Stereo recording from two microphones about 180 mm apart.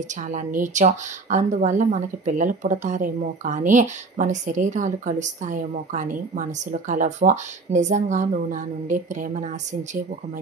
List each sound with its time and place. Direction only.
0.1 s a woman's voice: 45° right (ahead or behind)